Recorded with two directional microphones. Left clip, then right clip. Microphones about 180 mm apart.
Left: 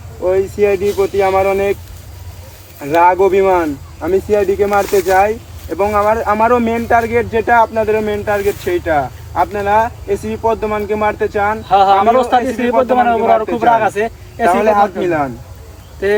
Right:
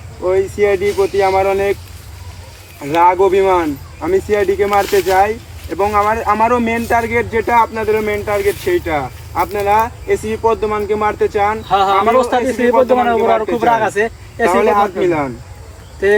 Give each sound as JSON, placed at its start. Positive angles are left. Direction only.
{"t": 0.2, "sound": "speech", "side_deg": 20}
{"t": 0.9, "sound": "speech", "side_deg": 50}
{"t": 1.1, "sound": "speech", "side_deg": 25}
{"t": 2.9, "sound": "speech", "side_deg": 25}
{"t": 11.7, "sound": "speech", "side_deg": 0}
{"t": 14.5, "sound": "speech", "side_deg": 25}